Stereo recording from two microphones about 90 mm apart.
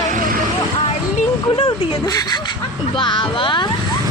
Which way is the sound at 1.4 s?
70° left (ahead or behind).